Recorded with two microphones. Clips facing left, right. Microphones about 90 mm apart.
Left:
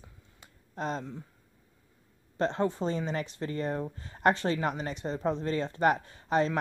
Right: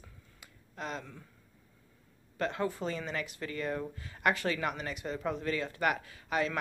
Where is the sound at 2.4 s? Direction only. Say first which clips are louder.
Left 5 dB; 30° left (ahead or behind).